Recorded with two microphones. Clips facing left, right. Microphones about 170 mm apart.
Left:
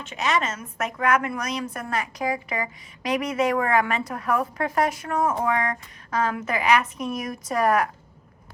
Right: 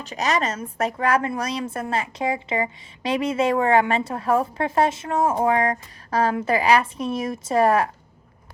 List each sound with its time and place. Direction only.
0.0 s a woman's voice: 40° right (ahead or behind)